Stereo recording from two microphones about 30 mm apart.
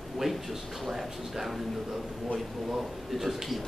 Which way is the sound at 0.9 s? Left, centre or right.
Centre.